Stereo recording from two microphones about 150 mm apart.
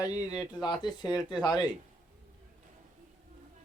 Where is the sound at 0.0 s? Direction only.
10° right (ahead or behind).